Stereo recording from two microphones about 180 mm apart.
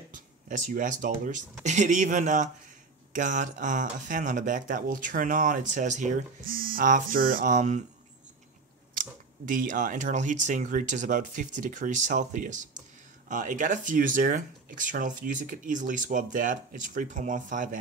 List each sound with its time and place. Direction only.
0.1 s speech: 45° right (ahead or behind)
9.5 s speech: 50° right (ahead or behind)